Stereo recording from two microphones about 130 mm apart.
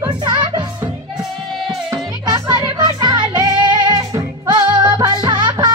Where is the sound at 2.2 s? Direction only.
30° right (ahead or behind).